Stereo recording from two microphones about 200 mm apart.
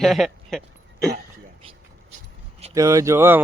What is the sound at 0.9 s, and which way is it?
Throat clearing, 55° right (ahead or behind).